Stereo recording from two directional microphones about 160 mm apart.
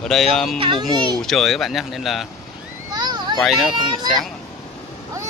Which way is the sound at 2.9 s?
25° right (ahead or behind).